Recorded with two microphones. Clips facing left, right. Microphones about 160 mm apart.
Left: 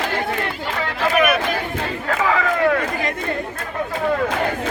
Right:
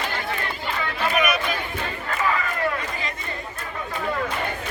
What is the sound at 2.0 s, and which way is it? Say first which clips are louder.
Crowd: left 6 dB; 90° left.